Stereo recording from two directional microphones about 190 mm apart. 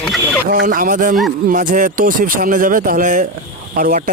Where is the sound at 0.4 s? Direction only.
50° right (ahead or behind).